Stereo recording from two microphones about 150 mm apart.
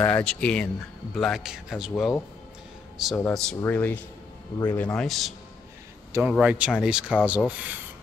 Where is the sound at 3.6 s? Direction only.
15° left (ahead or behind).